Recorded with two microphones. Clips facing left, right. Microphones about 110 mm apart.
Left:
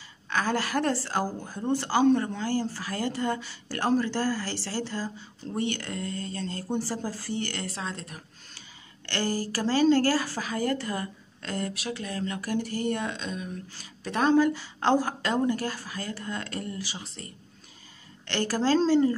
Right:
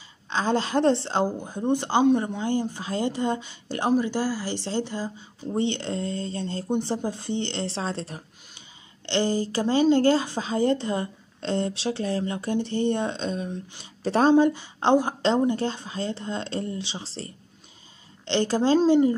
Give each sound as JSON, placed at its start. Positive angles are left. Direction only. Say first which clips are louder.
{"t": 0.3, "sound": "a woman's voice", "louder": "right 3 dB", "side_deg": -20}
{"t": 8.5, "sound": "a woman's voice", "louder": "left 1 dB", "side_deg": -20}